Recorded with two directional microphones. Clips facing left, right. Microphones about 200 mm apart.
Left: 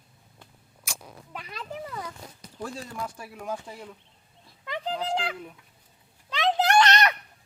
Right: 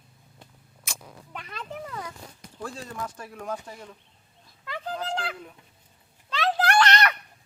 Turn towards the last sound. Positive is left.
turn(degrees=20)  # may be behind; listen again after turning